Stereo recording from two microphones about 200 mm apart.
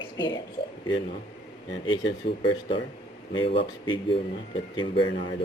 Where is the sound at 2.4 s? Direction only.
25° left (ahead or behind).